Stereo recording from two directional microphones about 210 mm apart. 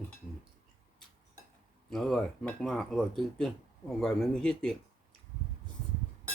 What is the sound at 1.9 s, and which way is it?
Speech, centre (ahead or behind).